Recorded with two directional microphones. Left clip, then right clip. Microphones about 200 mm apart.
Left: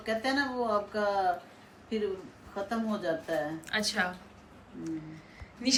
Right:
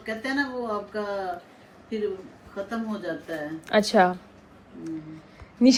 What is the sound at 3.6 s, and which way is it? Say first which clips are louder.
Speech: right 11 dB; 20° right (ahead or behind).